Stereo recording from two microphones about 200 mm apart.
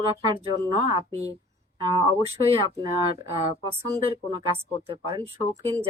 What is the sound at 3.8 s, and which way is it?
Speech, 20° right (ahead or behind).